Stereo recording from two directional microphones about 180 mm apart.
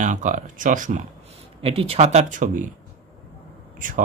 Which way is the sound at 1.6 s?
30° right (ahead or behind).